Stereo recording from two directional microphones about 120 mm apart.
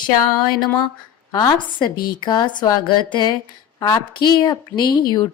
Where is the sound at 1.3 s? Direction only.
40° left (ahead or behind).